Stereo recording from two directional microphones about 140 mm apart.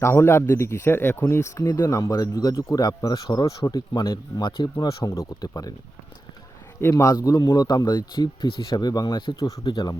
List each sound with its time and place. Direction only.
0.0 s speech: 20° left (ahead or behind)
6.8 s speech: 25° left (ahead or behind)